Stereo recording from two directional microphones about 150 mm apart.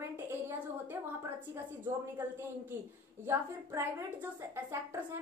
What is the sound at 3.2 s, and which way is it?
A woman's voice, 15° right (ahead or behind).